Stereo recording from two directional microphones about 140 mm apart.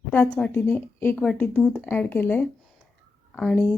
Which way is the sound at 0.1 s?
15° left (ahead or behind).